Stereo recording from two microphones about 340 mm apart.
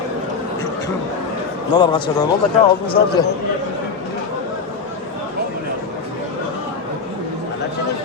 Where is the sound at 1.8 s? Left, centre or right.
Centre.